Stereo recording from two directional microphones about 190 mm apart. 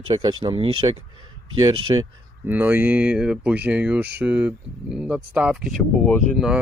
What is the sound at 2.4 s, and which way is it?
Speech, 10° right (ahead or behind).